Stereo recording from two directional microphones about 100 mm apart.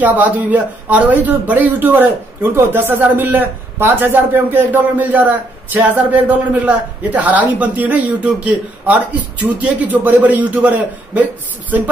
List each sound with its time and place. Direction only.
0.0 s a man's voice: 15° right (ahead or behind)